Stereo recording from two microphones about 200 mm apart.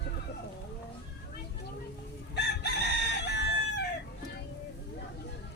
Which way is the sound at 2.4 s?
60° left (ahead or behind).